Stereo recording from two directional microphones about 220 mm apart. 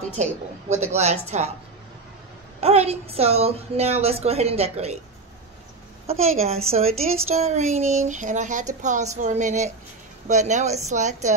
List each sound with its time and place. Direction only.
0.1 s speech: 30° right (ahead or behind)
2.6 s a woman's voice: 30° right (ahead or behind)
6.0 s a woman's voice: 30° right (ahead or behind)